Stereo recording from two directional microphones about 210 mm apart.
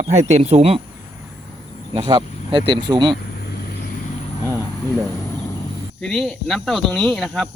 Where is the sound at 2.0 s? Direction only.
25° right (ahead or behind).